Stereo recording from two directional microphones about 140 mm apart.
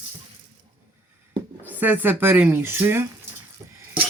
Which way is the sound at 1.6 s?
15° right (ahead or behind).